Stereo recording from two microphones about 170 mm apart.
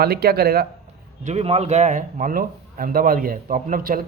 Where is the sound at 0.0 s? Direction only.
65° right (ahead or behind).